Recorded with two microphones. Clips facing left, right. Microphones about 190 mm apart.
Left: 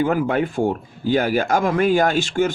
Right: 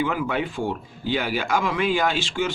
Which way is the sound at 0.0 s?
45° left (ahead or behind).